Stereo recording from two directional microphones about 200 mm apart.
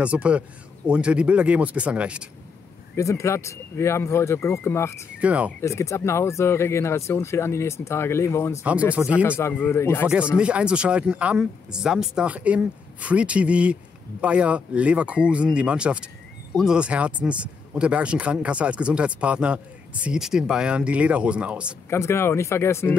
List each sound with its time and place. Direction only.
0.0 s speech: 5° right (ahead or behind)
3.0 s speech: 15° left (ahead or behind)
5.2 s speech: 5° right (ahead or behind)
5.6 s speech: 15° left (ahead or behind)
8.9 s speech: 5° right (ahead or behind)
9.4 s speech: 10° left (ahead or behind)
10.3 s speech: 5° right (ahead or behind)
21.8 s speech: 15° left (ahead or behind)